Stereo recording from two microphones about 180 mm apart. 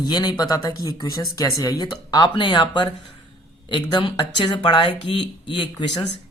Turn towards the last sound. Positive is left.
turn(degrees=30)  # may be behind; listen again after turning